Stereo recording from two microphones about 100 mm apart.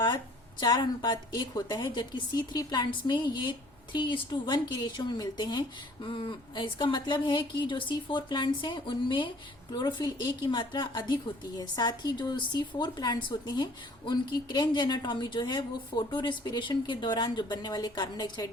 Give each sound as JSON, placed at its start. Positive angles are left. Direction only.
{"t": 0.6, "sound": "a woman's voice", "side_deg": 45}
{"t": 9.7, "sound": "a woman's voice", "side_deg": 45}